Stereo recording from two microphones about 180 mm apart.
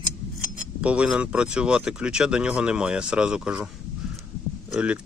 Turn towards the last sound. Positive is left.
turn(degrees=-5)  # may be behind; listen again after turning